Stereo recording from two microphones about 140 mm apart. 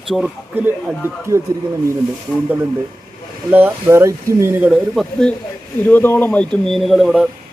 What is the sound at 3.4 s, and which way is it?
A man's voice, 10° right (ahead or behind).